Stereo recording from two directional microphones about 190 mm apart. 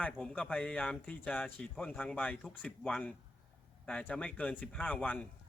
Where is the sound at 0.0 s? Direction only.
5° left (ahead or behind).